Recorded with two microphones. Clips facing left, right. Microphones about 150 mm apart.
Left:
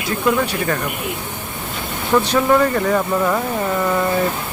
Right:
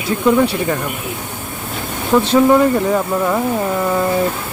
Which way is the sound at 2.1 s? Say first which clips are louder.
Right 3 dB; 25° right (ahead or behind).